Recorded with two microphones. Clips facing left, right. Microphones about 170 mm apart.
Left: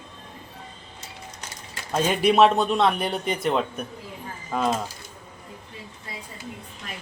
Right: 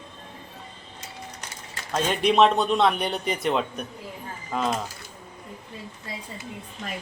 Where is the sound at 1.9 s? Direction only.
10° left (ahead or behind).